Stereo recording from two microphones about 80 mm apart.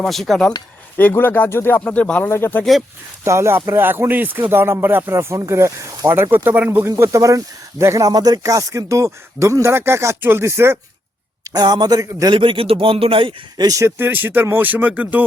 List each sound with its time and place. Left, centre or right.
0.0 s speech: centre
0.9 s speech: left
1.8 s speech: centre
3.2 s speech: right
5.1 s speech: right
6.3 s speech: right
6.7 s speech: right
11.4 s a man's voice: right
12.3 s a man's voice: right
13.7 s speech: right
14.0 s speech: right